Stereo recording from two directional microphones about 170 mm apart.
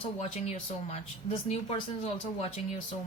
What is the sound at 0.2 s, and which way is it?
Speech, 40° left (ahead or behind).